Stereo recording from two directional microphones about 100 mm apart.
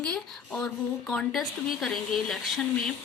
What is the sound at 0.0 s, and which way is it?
A woman's voice, 10° left (ahead or behind).